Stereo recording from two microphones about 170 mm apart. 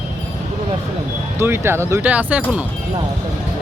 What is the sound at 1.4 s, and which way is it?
Speech, 15° right (ahead or behind).